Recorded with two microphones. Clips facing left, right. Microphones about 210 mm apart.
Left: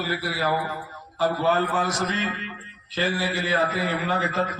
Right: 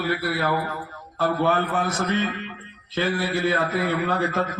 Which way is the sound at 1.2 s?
55° right (ahead or behind).